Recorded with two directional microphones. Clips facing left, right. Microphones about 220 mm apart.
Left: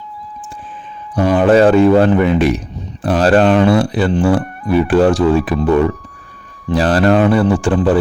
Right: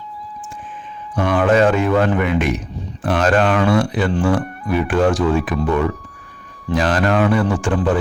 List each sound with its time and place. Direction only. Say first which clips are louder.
1.1 s speech: left 5 dB; 35° left (ahead or behind)